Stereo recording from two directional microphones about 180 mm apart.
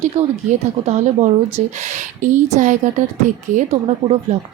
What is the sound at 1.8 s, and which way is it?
Speech, 40° right (ahead or behind).